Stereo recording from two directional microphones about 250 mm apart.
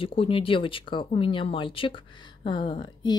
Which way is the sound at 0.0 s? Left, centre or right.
Left.